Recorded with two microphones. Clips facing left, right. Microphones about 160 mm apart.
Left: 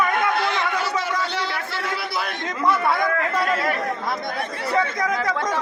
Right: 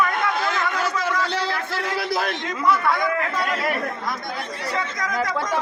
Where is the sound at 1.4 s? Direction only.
40° right (ahead or behind).